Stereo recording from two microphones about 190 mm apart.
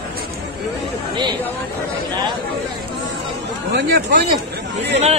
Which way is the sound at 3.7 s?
60° right (ahead or behind).